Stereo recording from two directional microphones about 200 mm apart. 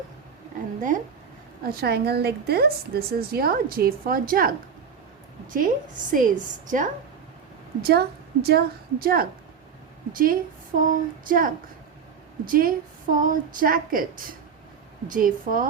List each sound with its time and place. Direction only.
0.8 s a woman's voice: 40° right (ahead or behind)
7.8 s a woman's voice: 50° right (ahead or behind)